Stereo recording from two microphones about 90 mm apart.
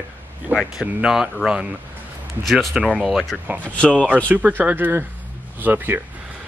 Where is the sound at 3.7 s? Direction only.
10° left (ahead or behind).